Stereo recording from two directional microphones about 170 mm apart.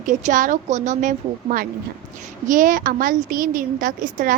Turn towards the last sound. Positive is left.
turn(degrees=-55)  # may be behind; listen again after turning